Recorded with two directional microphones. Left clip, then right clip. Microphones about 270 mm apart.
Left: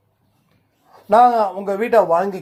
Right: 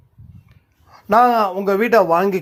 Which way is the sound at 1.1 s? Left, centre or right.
Right.